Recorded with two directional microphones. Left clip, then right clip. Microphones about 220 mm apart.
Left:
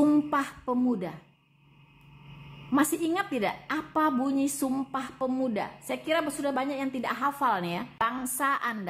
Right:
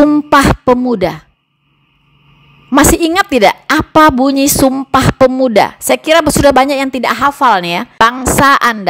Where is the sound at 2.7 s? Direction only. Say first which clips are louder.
Right 18 dB; 45° right (ahead or behind).